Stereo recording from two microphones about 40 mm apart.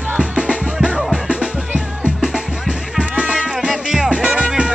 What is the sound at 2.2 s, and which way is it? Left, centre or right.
Music, centre.